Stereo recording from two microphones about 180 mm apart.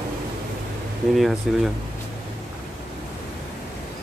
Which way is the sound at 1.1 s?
Centre (ahead or behind).